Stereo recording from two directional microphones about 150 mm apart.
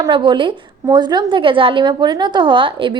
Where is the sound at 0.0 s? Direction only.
30° right (ahead or behind).